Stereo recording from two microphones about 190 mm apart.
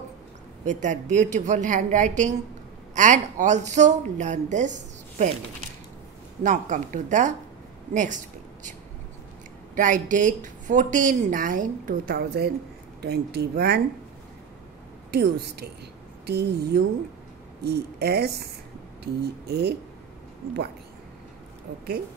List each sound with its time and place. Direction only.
0.7 s speech: 40° right (ahead or behind)
6.4 s speech: 40° right (ahead or behind)
9.8 s a woman's voice: 40° right (ahead or behind); by 13.7 s 60° right (ahead or behind)
15.0 s speech: 55° right (ahead or behind)